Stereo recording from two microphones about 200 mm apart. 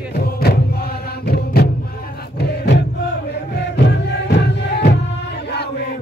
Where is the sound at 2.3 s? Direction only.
55° left (ahead or behind).